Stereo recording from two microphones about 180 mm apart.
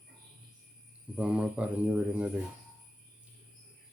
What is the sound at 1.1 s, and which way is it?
Speech, 5° right (ahead or behind).